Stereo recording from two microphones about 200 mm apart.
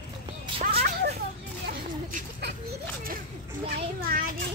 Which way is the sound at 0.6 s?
50° right (ahead or behind).